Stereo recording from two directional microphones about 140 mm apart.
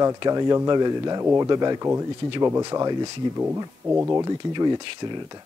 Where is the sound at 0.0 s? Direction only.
25° right (ahead or behind).